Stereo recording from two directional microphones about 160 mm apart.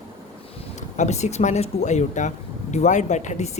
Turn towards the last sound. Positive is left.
turn(degrees=45)  # may be behind; listen again after turning